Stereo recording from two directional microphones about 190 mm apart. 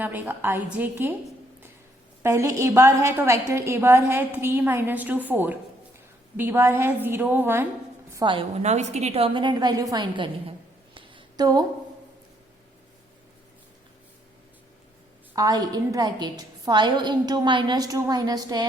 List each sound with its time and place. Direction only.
0.0 s a woman's voice: 10° right (ahead or behind)
2.2 s a woman's voice: 15° right (ahead or behind)
8.1 s a woman's voice: 25° right (ahead or behind)
10.9 s a sound: 25° right (ahead or behind)
15.4 s a woman's voice: 20° right (ahead or behind)